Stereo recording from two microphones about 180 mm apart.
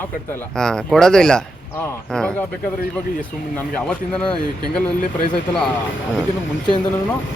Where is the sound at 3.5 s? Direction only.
5° left (ahead or behind).